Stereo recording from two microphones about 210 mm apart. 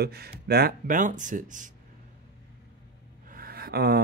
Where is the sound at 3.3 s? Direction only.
45° right (ahead or behind).